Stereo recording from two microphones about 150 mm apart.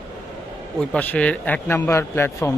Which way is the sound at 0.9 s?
10° left (ahead or behind).